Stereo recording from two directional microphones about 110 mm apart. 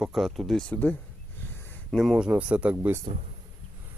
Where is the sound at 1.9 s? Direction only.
Centre (ahead or behind).